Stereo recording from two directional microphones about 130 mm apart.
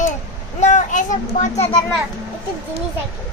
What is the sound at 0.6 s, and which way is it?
A child's voice, 65° left (ahead or behind).